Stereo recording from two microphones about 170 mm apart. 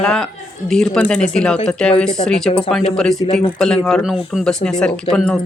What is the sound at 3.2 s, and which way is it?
Speech, 30° left (ahead or behind).